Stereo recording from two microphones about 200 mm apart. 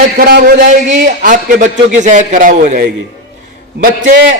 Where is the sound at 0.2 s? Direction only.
50° right (ahead or behind).